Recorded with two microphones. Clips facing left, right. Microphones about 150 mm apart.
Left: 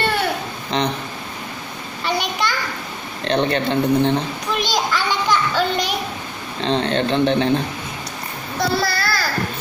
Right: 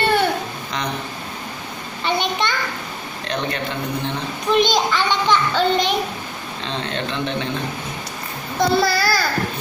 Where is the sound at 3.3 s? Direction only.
30° left (ahead or behind).